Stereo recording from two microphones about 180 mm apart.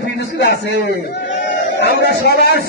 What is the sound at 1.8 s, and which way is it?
Speech, 70° left (ahead or behind).